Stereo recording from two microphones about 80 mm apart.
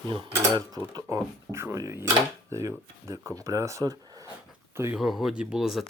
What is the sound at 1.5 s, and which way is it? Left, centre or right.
Speech, right.